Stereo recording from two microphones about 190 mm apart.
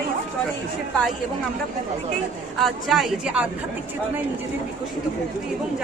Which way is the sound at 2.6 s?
Centre (ahead or behind).